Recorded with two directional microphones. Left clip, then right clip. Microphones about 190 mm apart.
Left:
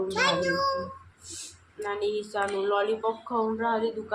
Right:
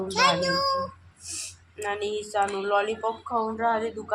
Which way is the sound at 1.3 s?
20° right (ahead or behind).